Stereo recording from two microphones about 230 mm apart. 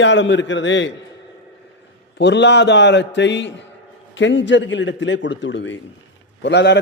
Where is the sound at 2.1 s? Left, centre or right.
Left.